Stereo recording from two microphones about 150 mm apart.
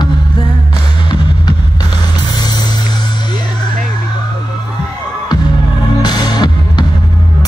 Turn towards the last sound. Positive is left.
turn(degrees=30)  # may be behind; listen again after turning